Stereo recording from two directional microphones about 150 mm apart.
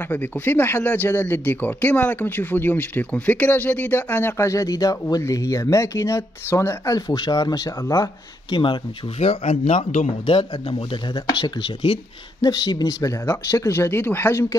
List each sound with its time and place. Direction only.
0.1 s speech: 15° left (ahead or behind)